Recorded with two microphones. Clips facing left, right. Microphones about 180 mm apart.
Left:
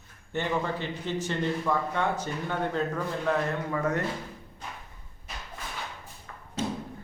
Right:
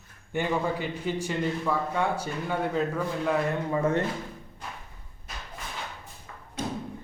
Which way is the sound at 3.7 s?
25° right (ahead or behind).